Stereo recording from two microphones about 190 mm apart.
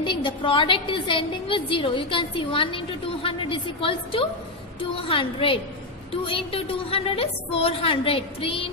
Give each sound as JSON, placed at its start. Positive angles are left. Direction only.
{"t": 0.0, "sound": "a woman's voice", "side_deg": 25}